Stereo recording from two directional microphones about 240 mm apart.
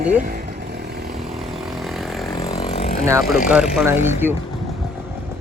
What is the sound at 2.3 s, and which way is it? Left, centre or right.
Vehicle, left.